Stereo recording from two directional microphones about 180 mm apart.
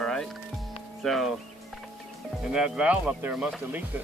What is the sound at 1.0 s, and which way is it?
Speech, centre (ahead or behind).